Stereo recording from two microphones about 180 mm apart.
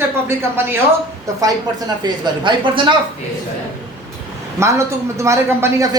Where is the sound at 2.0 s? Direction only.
25° right (ahead or behind).